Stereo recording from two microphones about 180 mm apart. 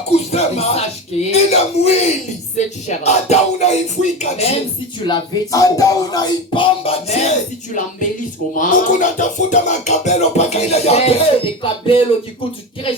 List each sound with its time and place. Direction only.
0.3 s music: 35° left (ahead or behind)
5.0 s music: 25° left (ahead or behind)